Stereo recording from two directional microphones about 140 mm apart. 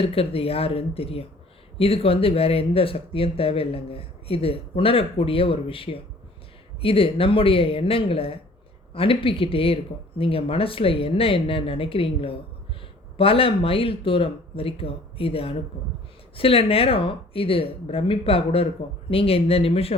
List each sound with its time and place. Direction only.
0.0 s speech: 45° left (ahead or behind)